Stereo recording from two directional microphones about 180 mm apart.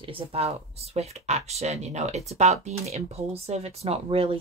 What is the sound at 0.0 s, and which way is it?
Speech, 30° right (ahead or behind).